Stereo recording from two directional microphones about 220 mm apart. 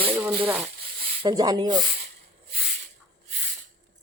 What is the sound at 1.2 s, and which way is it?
Speech, 15° right (ahead or behind).